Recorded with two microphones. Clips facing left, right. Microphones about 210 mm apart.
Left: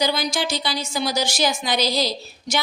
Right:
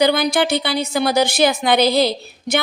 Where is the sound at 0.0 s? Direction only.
60° right (ahead or behind).